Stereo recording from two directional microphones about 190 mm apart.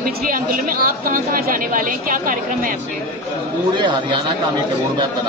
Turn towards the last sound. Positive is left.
turn(degrees=-25)  # may be behind; listen again after turning